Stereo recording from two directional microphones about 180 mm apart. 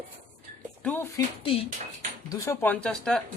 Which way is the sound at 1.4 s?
30° left (ahead or behind).